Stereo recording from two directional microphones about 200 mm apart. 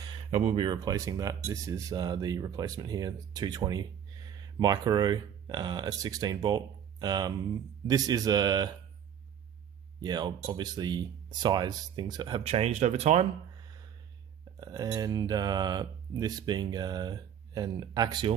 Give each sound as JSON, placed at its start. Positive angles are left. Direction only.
{"t": 0.0, "sound": "speech", "side_deg": -25}
{"t": 10.0, "sound": "speech", "side_deg": -20}
{"t": 14.6, "sound": "speech", "side_deg": -20}